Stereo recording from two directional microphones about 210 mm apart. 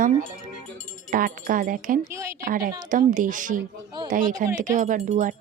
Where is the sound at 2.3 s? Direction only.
40° right (ahead or behind).